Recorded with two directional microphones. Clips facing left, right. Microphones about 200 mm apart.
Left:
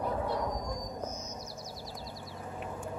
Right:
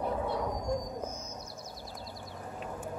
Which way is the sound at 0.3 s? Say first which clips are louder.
Even; 5° right (ahead or behind).